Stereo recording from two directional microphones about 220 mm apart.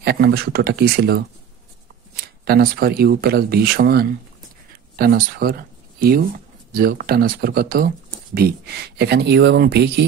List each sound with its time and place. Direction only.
0.0 s speech: 45° right (ahead or behind)
2.4 s speech: 45° right (ahead or behind)